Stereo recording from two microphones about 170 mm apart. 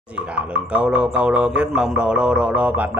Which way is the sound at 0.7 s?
5° right (ahead or behind).